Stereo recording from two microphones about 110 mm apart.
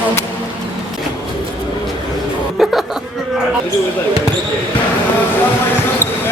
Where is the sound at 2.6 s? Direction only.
Centre (ahead or behind).